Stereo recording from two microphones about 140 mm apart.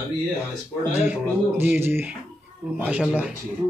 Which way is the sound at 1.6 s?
15° right (ahead or behind).